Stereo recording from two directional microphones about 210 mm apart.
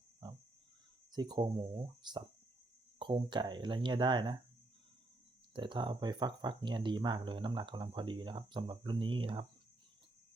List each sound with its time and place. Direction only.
1.1 s speech: 20° right (ahead or behind)
5.5 s speech: 20° right (ahead or behind)